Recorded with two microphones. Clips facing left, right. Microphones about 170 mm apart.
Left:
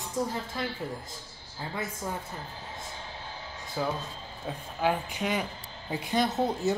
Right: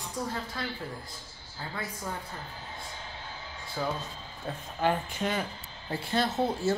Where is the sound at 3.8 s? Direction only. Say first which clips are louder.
Left 1 dB; 10° left (ahead or behind).